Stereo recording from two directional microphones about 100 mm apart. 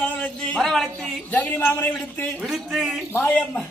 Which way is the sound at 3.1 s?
15° left (ahead or behind).